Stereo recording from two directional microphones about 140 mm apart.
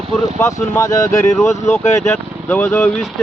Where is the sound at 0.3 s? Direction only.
20° left (ahead or behind).